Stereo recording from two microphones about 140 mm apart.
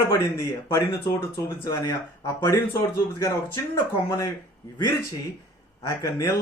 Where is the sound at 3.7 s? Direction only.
25° left (ahead or behind).